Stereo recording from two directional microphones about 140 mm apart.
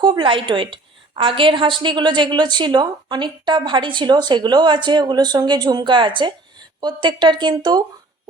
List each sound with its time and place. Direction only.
0.0 s a woman's voice: 35° right (ahead or behind)